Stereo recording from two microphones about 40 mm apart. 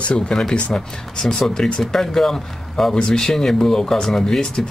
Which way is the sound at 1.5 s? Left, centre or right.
Centre.